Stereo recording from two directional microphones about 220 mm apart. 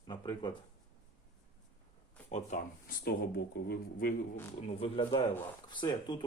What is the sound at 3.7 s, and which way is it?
Speech, 40° left (ahead or behind).